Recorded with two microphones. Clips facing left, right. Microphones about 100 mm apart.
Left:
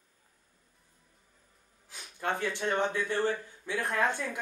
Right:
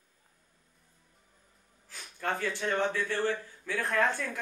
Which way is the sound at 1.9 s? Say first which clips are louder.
Even; 20° left (ahead or behind).